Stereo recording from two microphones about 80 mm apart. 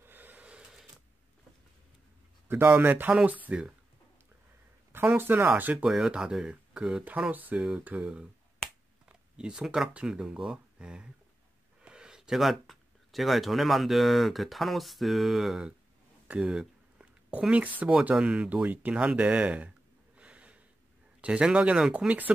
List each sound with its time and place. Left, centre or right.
0.0 s snort: right
2.4 s a sound: right
2.7 s speech: right
4.9 s speech: right
5.9 s speech: centre
16.3 s a sound: centre
17.3 s speech: centre
20.2 s gasp: centre
21.2 s speech: centre